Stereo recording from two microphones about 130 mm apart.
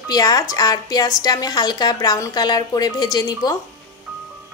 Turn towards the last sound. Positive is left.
turn(degrees=30)  # may be behind; listen again after turning